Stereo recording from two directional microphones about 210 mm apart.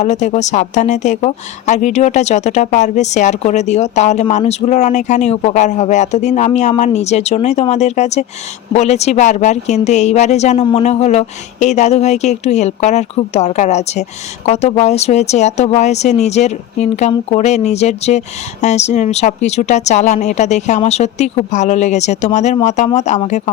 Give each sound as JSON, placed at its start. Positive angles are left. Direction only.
{"t": 0.0, "sound": "a woman's voice", "side_deg": 35}